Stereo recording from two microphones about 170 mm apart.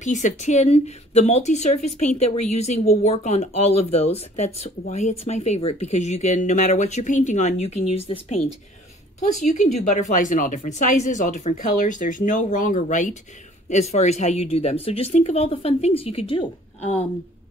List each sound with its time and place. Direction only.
0.0 s speech: 45° left (ahead or behind)